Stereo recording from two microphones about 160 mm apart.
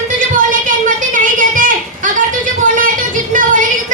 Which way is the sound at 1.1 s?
55° right (ahead or behind).